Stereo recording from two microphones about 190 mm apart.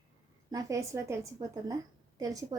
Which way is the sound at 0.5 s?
15° right (ahead or behind).